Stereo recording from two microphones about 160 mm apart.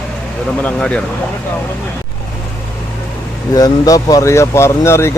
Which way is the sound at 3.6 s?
20° left (ahead or behind).